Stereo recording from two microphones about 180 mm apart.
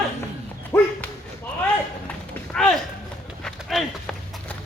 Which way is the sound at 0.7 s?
15° left (ahead or behind).